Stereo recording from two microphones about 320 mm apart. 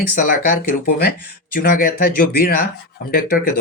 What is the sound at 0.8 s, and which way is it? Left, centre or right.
Speech, left.